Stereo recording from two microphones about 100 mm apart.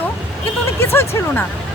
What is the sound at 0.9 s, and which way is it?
Speech, 25° left (ahead or behind).